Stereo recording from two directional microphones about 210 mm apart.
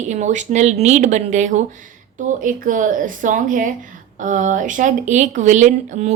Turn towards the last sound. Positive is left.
turn(degrees=-35)  # may be behind; listen again after turning